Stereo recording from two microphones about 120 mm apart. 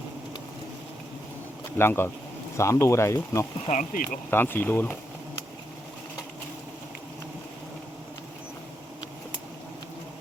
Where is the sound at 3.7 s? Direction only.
90° left.